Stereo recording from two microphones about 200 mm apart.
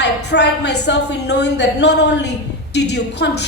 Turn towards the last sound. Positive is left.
turn(degrees=55)  # may be behind; listen again after turning